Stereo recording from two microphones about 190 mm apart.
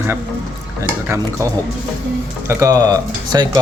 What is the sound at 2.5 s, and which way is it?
Speech, 15° right (ahead or behind).